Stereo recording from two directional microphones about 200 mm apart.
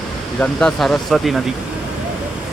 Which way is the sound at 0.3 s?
5° left (ahead or behind).